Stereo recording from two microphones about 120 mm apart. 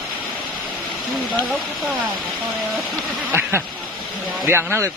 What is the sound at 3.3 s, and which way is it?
Speech, 20° right (ahead or behind).